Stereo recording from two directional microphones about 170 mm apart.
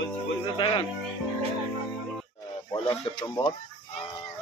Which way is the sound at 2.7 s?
20° left (ahead or behind).